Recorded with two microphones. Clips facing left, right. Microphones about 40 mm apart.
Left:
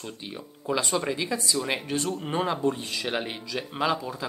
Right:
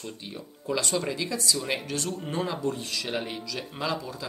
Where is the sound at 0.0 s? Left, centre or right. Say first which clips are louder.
Left 1 dB; centre.